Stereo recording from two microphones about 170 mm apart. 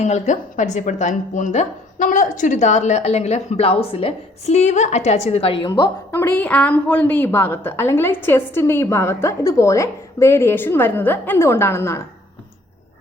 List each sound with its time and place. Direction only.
0.0 s speech: 45° left (ahead or behind)
5.8 s a woman's voice: 15° left (ahead or behind)